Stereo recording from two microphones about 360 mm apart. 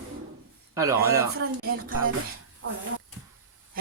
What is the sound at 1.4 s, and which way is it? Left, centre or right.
Speech, right.